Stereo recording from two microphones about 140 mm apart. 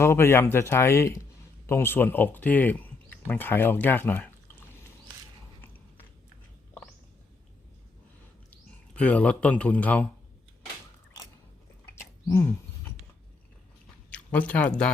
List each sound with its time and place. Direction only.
0.0 s speech: 20° left (ahead or behind)
8.9 s speech: 10° left (ahead or behind)
11.9 s a sound: 20° left (ahead or behind)
14.1 s speech: 10° left (ahead or behind)